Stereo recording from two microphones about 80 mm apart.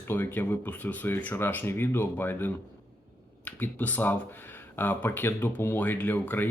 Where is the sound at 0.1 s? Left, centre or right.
Left.